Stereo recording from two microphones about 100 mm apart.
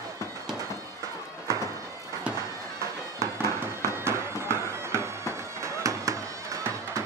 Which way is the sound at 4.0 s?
25° right (ahead or behind).